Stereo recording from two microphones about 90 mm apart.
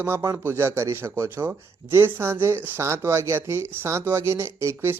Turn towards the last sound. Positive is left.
turn(degrees=-30)  # may be behind; listen again after turning